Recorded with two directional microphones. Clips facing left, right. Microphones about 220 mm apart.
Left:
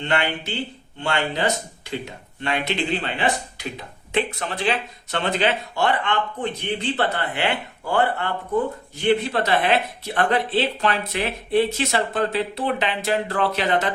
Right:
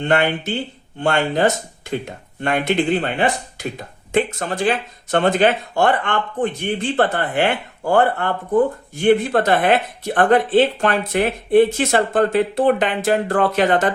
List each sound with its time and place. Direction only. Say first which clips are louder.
0.0 s speech: right 6 dB; 50° right (ahead or behind)